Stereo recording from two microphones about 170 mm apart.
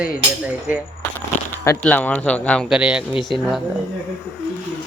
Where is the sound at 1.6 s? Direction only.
10° left (ahead or behind); by 3.2 s 5° right (ahead or behind).